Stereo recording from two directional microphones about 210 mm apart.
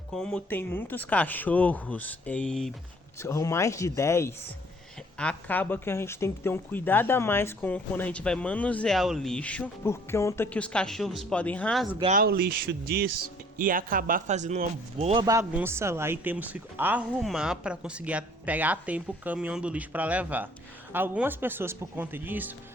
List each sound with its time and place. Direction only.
0.1 s speech: 5° left (ahead or behind)
3.2 s speech: 15° left (ahead or behind)
12.1 s speech: 45° right (ahead or behind); by 22.5 s 10° right (ahead or behind)